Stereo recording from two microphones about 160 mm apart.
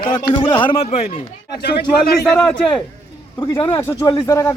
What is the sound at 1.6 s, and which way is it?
Speech, 90° left.